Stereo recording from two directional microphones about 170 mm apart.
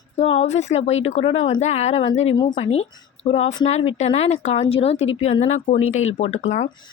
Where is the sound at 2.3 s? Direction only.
30° left (ahead or behind).